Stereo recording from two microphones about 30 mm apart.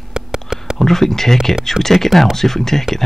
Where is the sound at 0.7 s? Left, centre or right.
Centre.